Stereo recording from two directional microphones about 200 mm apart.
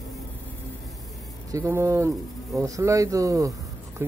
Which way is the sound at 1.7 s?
15° right (ahead or behind).